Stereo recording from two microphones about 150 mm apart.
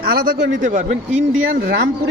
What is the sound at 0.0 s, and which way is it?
A man's voice, 80° right.